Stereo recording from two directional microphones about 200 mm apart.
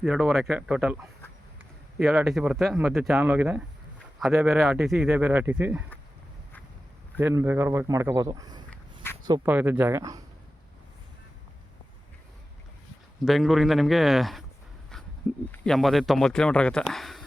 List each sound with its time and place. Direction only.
0.0 s speech: centre (ahead or behind)
2.0 s speech: centre (ahead or behind)
7.2 s speech: 10° right (ahead or behind)
9.5 s speech: 5° right (ahead or behind)
13.2 s speech: centre (ahead or behind)
15.5 s speech: 5° left (ahead or behind)